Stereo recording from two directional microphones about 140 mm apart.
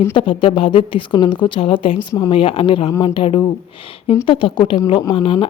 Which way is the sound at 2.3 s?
40° left (ahead or behind).